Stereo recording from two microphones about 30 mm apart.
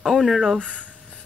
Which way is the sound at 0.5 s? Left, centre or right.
Right.